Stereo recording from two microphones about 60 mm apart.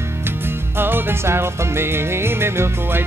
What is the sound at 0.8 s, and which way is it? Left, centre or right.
Music, right.